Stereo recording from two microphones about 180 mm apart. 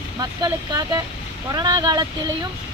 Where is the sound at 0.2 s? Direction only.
20° right (ahead or behind).